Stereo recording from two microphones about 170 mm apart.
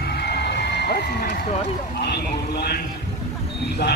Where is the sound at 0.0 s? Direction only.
70° left (ahead or behind).